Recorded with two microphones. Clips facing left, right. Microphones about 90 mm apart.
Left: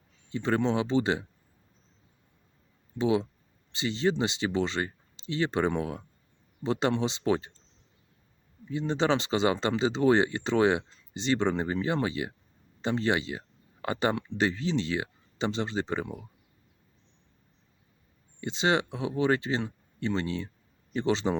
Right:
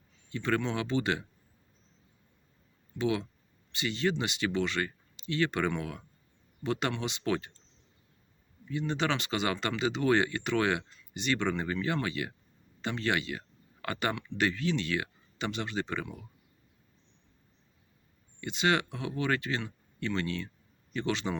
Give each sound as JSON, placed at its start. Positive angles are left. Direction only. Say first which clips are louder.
{"t": 0.3, "sound": "speech", "louder": "left 4 dB", "side_deg": 25}
{"t": 3.0, "sound": "speech", "louder": "left 4 dB", "side_deg": 25}
{"t": 8.7, "sound": "speech", "louder": "left 4 dB", "side_deg": 25}
{"t": 18.3, "sound": "speech", "louder": "left 2 dB", "side_deg": 25}